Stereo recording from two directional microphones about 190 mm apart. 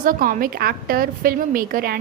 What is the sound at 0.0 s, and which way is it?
A woman's voice, 45° right (ahead or behind).